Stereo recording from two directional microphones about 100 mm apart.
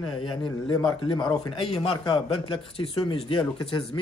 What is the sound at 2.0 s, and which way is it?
Speech, 55° left (ahead or behind).